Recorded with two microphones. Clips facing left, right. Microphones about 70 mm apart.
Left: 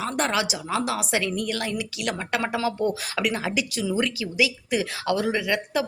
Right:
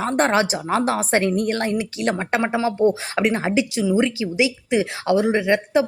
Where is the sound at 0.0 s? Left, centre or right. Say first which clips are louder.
Right 6 dB; right.